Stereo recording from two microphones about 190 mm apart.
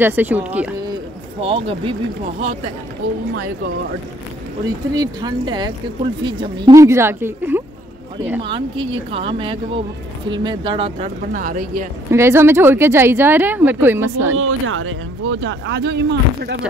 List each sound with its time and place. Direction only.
0.0 s speech: 10° right (ahead or behind)
1.4 s speech: 30° right (ahead or behind)
4.9 s speech: 20° right (ahead or behind)
8.5 s speech: 25° right (ahead or behind)
11.3 s speech: 45° right (ahead or behind)
12.1 s speech: 15° right (ahead or behind)
14.3 s speech: 90° right; by 16.5 s 65° right (ahead or behind)